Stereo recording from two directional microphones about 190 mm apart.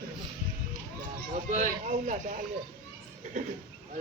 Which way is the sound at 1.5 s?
40° right (ahead or behind).